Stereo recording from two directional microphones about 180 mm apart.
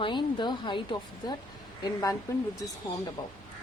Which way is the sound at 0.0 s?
25° left (ahead or behind).